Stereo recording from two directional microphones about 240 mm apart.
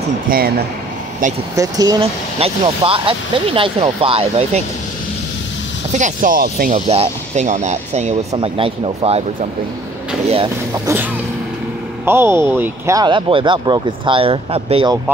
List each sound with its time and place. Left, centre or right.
0.3 s speech: right
1.5 s speech: centre
5.9 s speech: right
12.0 s speech: centre